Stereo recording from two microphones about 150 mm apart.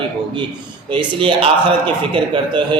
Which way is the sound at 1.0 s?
35° right (ahead or behind).